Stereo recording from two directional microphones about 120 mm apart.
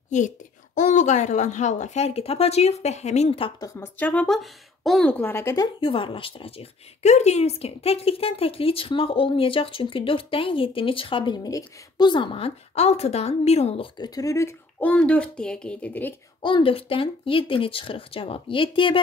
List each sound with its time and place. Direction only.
0.7 s speech: 90° left; by 3.5 s 50° left (ahead or behind)
3.5 s speech: 25° left (ahead or behind)
4.1 s speech: 5° left (ahead or behind)
5.1 s speech: 15° left (ahead or behind)
5.8 s a woman's voice: 45° left (ahead or behind)
13.9 s speech: 35° left (ahead or behind)
14.9 s a child's voice: 10° left (ahead or behind)
16.3 s a woman's voice: 40° left (ahead or behind)